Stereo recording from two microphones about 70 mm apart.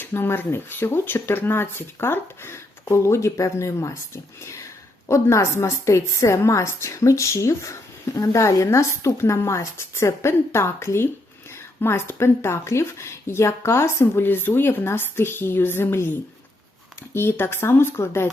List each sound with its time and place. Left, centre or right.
0.0 s a woman's voice: left
17.2 s speech: left